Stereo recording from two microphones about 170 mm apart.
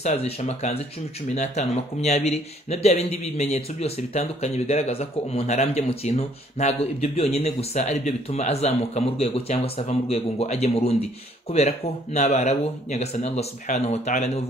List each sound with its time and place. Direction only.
0.0 s speech: 40° left (ahead or behind)